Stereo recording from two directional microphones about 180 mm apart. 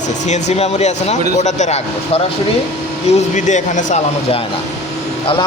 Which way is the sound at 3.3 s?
45° left (ahead or behind).